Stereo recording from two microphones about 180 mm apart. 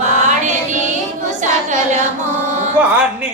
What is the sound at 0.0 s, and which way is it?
Music, 45° right (ahead or behind).